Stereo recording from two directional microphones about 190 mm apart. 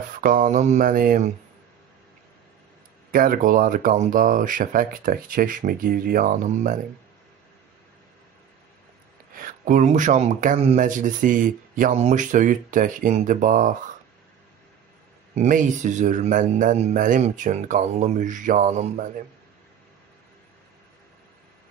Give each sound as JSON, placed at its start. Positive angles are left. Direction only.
{"t": 0.2, "sound": "speech", "side_deg": -45}
{"t": 3.1, "sound": "speech", "side_deg": -50}
{"t": 9.3, "sound": "speech", "side_deg": -45}
{"t": 15.3, "sound": "a man's voice", "side_deg": -40}